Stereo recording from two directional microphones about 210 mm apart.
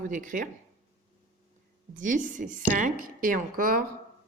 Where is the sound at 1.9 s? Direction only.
35° right (ahead or behind).